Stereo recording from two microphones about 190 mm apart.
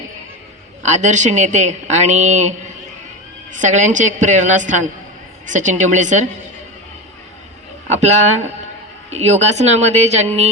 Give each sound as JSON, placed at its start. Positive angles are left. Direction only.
{"t": 0.8, "sound": "speech", "side_deg": -40}
{"t": 3.6, "sound": "speech", "side_deg": -40}
{"t": 7.9, "sound": "speech", "side_deg": -35}